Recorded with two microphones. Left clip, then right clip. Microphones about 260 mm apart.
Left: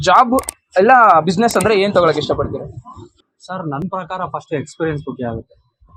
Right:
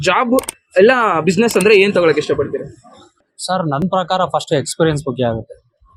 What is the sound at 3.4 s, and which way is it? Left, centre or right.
Speech, right.